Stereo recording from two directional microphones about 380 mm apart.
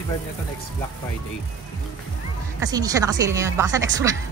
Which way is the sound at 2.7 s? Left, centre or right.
Centre.